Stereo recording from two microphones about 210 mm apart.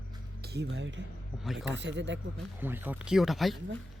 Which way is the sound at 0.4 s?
55° right (ahead or behind).